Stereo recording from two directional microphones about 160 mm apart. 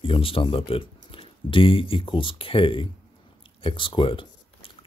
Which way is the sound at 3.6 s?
30° left (ahead or behind).